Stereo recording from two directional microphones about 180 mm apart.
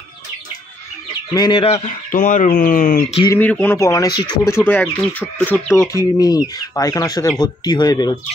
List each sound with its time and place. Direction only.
1.3 s speech: 25° left (ahead or behind); by 3.1 s 45° left (ahead or behind)
3.3 s speech: 10° left (ahead or behind)
5.9 s speech: 20° left (ahead or behind)